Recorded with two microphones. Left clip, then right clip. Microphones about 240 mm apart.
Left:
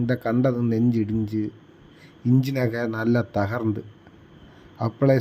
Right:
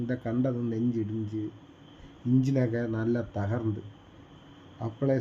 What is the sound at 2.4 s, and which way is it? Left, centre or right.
A man's voice, left.